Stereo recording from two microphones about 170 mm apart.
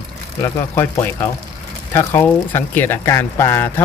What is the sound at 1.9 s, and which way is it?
Speech, 15° left (ahead or behind).